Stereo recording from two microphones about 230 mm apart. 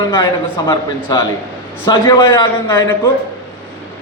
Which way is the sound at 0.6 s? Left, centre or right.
Centre.